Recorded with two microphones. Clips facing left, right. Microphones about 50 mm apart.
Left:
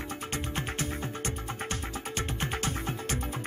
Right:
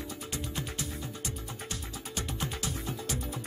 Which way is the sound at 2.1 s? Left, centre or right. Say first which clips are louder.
Left 2 dB; left.